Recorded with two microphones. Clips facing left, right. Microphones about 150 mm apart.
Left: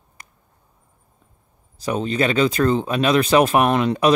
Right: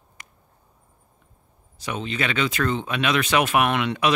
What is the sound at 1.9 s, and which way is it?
Speech, 40° left (ahead or behind).